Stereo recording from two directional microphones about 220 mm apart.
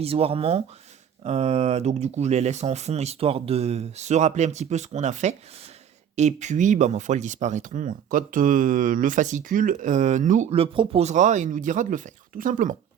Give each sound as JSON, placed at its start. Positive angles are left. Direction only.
{"t": 0.0, "sound": "speech", "side_deg": -25}